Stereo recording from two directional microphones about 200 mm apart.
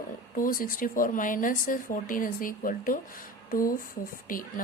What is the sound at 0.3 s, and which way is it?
A woman's voice, 45° left (ahead or behind).